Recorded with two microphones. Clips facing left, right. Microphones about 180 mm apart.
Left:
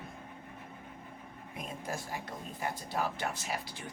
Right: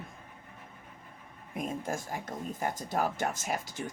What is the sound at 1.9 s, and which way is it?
Speech, 45° right (ahead or behind).